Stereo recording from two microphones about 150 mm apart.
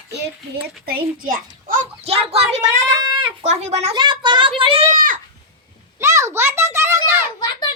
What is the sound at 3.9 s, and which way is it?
Speech, 30° right (ahead or behind).